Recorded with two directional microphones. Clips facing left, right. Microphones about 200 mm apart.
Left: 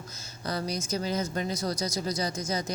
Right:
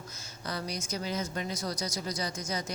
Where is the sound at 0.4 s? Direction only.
40° left (ahead or behind).